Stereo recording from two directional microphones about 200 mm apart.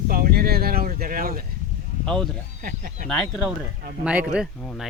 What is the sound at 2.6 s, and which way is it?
Speech, 40° right (ahead or behind).